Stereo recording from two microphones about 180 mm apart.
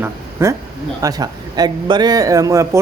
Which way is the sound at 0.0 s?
15° right (ahead or behind).